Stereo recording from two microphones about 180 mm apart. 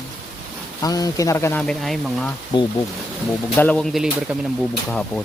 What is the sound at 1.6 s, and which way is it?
Speech, 5° left (ahead or behind).